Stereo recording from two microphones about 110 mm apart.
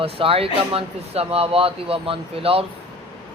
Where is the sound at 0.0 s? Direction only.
60° right (ahead or behind).